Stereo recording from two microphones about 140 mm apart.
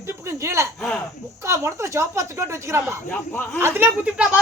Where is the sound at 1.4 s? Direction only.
20° right (ahead or behind).